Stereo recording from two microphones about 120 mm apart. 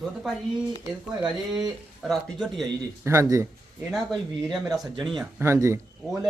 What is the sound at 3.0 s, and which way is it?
Speech, 25° right (ahead or behind).